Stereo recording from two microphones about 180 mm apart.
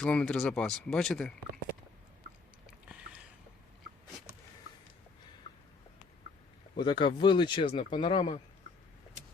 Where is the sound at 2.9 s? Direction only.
5° right (ahead or behind).